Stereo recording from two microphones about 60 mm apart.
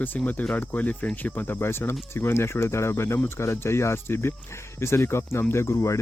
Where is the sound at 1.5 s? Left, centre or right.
Left.